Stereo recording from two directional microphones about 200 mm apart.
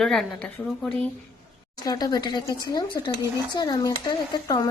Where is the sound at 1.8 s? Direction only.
20° left (ahead or behind).